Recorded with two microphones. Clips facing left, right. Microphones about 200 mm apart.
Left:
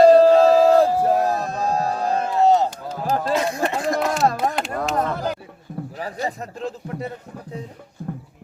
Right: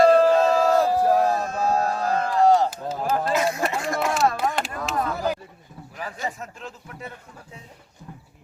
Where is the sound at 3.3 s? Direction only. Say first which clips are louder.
Left 2 dB; 35° left (ahead or behind).